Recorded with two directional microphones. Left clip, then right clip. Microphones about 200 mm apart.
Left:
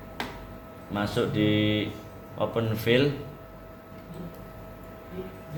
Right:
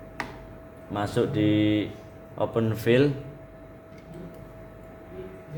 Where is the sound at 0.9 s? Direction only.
60° right (ahead or behind).